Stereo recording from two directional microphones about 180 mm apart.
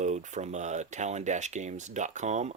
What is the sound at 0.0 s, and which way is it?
Speech, 40° right (ahead or behind).